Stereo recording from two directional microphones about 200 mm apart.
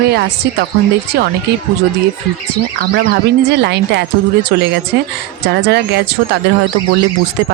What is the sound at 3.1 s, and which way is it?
A woman's voice, 55° right (ahead or behind).